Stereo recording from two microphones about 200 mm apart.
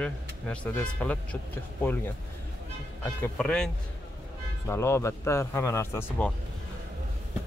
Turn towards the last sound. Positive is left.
turn(degrees=15)  # may be behind; listen again after turning